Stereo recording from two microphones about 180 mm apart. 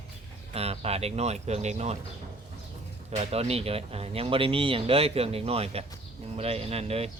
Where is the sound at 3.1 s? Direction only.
35° right (ahead or behind).